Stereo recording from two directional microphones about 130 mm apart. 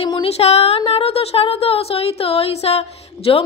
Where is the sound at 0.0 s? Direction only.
45° left (ahead or behind).